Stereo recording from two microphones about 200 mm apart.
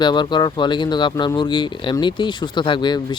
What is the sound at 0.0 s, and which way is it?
Speech, 20° left (ahead or behind).